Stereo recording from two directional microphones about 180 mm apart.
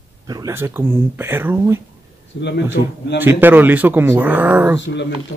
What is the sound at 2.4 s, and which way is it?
Speech, 80° left.